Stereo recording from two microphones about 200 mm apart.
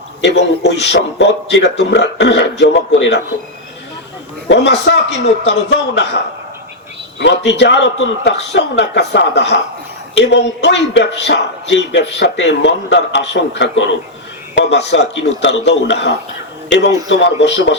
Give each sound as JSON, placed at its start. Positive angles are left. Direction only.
{"t": 0.2, "sound": "speech", "side_deg": 60}
{"t": 4.4, "sound": "speech", "side_deg": 60}
{"t": 7.2, "sound": "speech", "side_deg": 60}